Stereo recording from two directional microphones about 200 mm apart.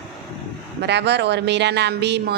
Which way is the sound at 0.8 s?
60° right (ahead or behind).